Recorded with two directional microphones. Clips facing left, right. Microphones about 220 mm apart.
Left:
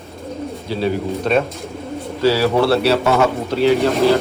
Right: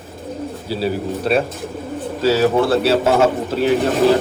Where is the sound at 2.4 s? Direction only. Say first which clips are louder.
Right 2 dB; 50° right (ahead or behind).